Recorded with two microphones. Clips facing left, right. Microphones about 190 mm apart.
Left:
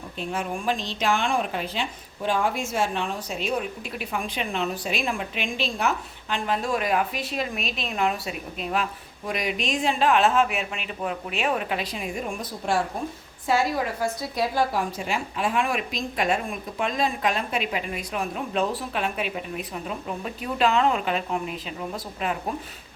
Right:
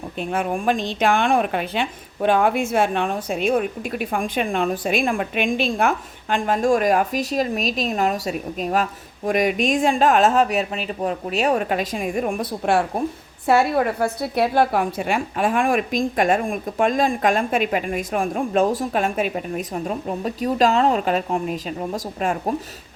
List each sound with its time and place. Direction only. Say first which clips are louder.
0.2 s a woman's voice: right 6 dB; 55° right (ahead or behind)